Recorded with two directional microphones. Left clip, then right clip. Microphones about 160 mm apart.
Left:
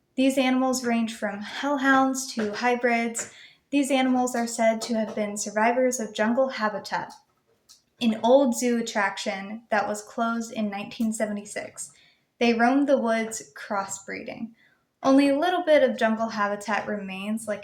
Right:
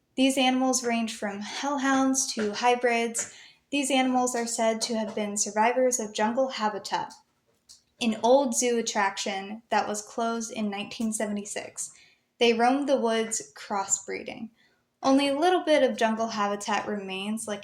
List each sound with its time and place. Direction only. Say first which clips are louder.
0.2 s speech: left 1 dB; 30° right (ahead or behind)